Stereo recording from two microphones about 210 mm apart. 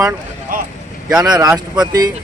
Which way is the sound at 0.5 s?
40° right (ahead or behind).